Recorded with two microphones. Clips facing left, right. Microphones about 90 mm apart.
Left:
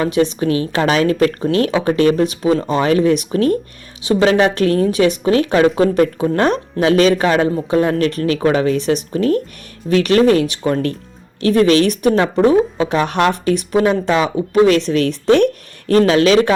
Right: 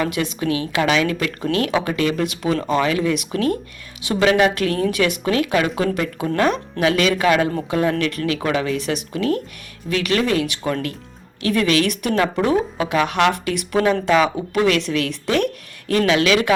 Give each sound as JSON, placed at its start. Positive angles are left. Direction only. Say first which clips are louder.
{"t": 0.0, "sound": "a woman's voice", "louder": "left 6 dB", "side_deg": 30}
{"t": 3.1, "sound": "a woman's voice", "louder": "left 6 dB", "side_deg": 40}
{"t": 13.7, "sound": "speech", "louder": "even", "side_deg": 25}
{"t": 14.8, "sound": "a woman's voice", "louder": "left 8 dB", "side_deg": 35}